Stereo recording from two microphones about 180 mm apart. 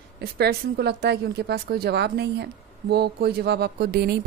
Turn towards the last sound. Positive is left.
turn(degrees=-60)  # may be behind; listen again after turning